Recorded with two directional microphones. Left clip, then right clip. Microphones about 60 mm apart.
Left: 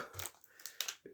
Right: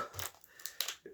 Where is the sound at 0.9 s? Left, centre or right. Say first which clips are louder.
Right 2 dB; right.